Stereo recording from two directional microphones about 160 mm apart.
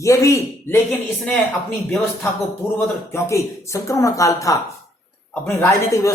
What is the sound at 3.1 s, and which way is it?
Speech, 20° left (ahead or behind).